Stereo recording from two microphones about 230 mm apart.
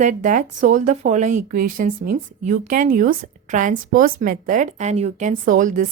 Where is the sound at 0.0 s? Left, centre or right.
Right.